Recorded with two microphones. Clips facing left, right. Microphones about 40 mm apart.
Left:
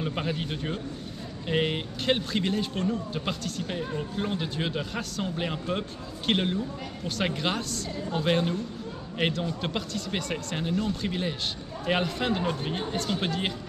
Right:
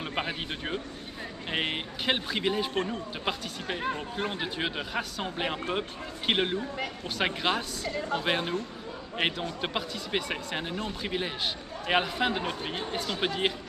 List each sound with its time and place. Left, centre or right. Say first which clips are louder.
0.0 s speech: left 2 dB; right
2.7 s speech: left 2 dB; right
3.3 s a man's voice: even; centre